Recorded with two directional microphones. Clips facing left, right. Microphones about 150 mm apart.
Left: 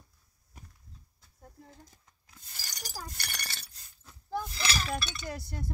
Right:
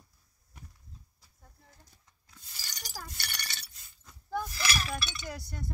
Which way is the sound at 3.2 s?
45° left (ahead or behind).